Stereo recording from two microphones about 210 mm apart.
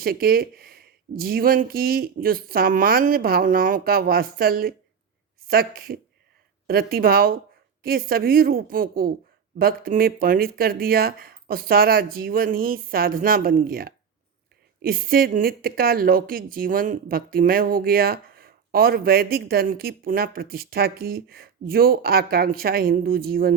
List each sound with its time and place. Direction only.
0.0 s speech: 45° right (ahead or behind)